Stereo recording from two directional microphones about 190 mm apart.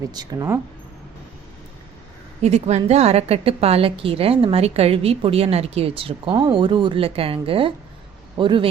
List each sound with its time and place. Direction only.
0.1 s speech: 20° right (ahead or behind)
2.4 s a woman's voice: 35° right (ahead or behind)